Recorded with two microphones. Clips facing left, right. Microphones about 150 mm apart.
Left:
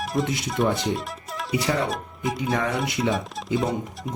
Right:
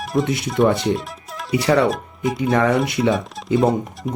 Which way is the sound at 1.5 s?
70° right (ahead or behind).